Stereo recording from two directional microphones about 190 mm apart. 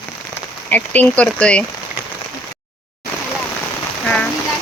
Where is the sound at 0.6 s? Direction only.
10° left (ahead or behind).